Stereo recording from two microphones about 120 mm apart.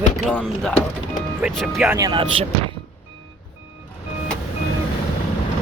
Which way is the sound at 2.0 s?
35° right (ahead or behind).